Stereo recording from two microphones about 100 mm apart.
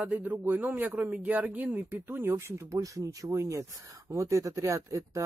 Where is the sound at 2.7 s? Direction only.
35° right (ahead or behind).